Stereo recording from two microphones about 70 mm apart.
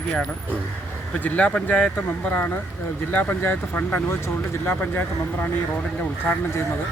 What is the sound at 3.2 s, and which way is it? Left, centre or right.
Speech, left.